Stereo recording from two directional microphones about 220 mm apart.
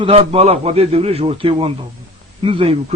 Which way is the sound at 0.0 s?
25° right (ahead or behind).